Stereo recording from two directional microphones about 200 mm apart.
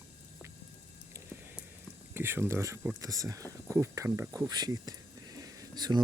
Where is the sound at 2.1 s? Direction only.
10° right (ahead or behind).